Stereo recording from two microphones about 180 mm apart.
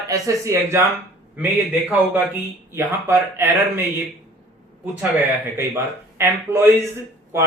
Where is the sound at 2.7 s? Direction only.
15° right (ahead or behind).